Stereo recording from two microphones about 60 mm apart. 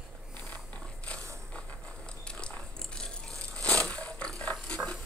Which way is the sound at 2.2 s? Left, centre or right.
Centre.